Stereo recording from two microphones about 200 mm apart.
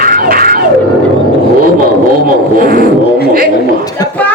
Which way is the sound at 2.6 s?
45° right (ahead or behind).